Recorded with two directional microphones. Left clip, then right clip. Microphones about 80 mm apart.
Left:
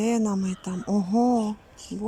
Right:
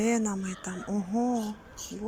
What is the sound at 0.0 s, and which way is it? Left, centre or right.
Speech, left.